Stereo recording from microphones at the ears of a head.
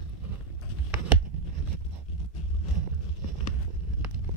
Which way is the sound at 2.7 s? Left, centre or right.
Right.